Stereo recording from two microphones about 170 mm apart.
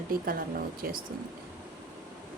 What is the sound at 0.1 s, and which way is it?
Speech, 60° right (ahead or behind).